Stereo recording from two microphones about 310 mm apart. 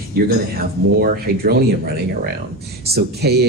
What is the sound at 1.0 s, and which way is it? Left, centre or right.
Speech, right.